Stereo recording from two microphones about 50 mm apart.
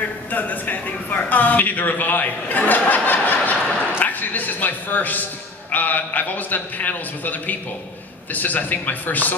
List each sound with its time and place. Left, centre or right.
0.3 s a woman's voice: left